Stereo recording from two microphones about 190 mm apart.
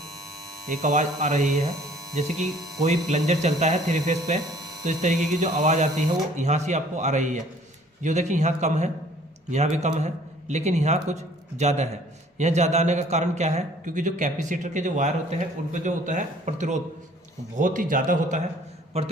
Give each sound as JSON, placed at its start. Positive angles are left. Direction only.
{"t": 0.7, "sound": "a man's voice", "side_deg": -40}